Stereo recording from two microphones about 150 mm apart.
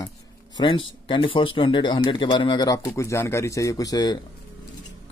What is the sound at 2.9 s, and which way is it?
Speech, 15° left (ahead or behind).